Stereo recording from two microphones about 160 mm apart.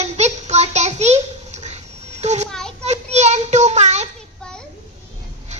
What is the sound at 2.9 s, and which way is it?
Child singing, 45° right (ahead or behind).